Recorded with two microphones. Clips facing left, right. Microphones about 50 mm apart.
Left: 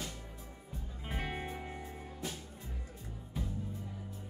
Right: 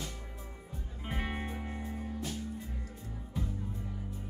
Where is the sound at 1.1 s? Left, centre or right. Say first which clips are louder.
Right 2 dB; centre.